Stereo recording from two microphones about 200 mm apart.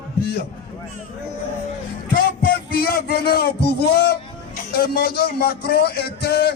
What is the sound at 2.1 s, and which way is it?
Music, 45° left (ahead or behind).